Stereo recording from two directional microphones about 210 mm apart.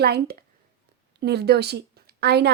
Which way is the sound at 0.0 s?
50° right (ahead or behind).